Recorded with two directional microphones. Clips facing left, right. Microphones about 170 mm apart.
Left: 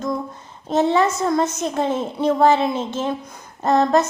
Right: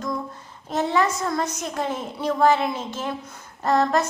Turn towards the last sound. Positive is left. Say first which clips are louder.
# left 4 dB
turn(degrees=20)  # may be behind; listen again after turning